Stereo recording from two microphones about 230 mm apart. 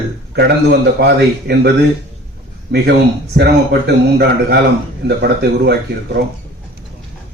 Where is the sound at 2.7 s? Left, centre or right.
Right.